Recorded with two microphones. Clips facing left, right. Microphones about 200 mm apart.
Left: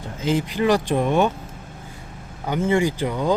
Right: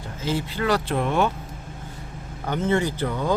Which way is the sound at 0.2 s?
15° left (ahead or behind).